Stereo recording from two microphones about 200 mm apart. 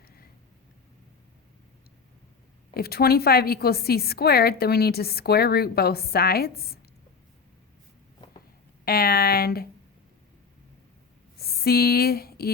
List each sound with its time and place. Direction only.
2.7 s a woman's voice: 50° left (ahead or behind)
8.8 s a woman's voice: 50° left (ahead or behind)
11.3 s speech: 50° left (ahead or behind)